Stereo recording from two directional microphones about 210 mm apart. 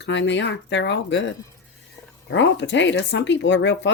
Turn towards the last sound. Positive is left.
turn(degrees=60)  # may be behind; listen again after turning